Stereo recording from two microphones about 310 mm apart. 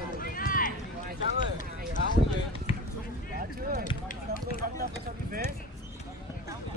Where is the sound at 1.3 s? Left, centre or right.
Left.